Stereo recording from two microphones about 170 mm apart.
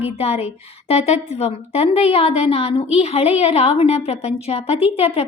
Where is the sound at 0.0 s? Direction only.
40° left (ahead or behind).